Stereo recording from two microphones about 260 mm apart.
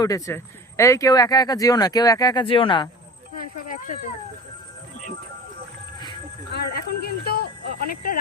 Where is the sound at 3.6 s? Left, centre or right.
Left.